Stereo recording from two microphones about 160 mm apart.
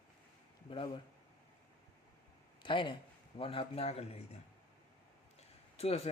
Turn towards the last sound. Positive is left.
turn(degrees=40)  # may be behind; listen again after turning